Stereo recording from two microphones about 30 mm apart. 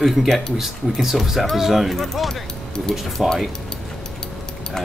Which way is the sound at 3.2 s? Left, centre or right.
Centre.